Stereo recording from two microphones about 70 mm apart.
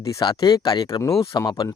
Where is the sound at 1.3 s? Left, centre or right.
Left.